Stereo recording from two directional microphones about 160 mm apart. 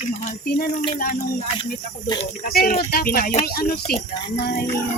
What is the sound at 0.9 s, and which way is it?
Speech, 60° left (ahead or behind).